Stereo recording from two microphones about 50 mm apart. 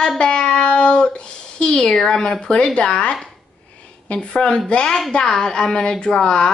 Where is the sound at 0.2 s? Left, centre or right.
Centre.